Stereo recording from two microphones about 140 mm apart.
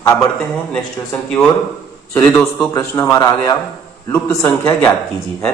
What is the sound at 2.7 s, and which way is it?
A man's voice, 25° left (ahead or behind).